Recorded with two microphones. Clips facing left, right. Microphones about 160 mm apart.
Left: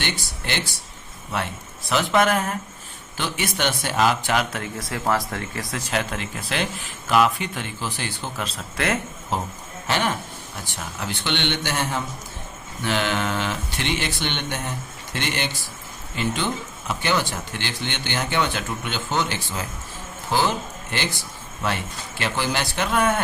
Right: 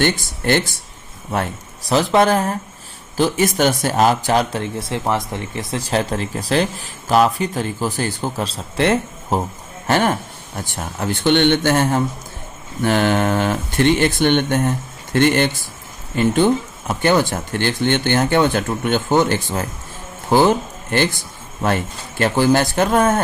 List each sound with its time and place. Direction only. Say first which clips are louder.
0.0 s speech: right 11 dB; 50° right (ahead or behind)
1.9 s a man's voice: right 5 dB; 35° right (ahead or behind)
9.8 s speech: right 7 dB; 50° right (ahead or behind)
22.2 s speech: right 10 dB; 45° right (ahead or behind)